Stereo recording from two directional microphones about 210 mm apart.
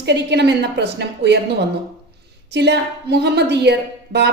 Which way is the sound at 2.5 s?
55° right (ahead or behind).